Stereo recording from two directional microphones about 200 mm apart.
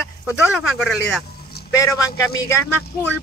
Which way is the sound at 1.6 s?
50° left (ahead or behind).